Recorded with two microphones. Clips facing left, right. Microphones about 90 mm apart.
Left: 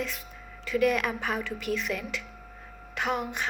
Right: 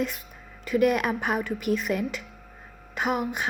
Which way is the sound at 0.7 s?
50° right (ahead or behind).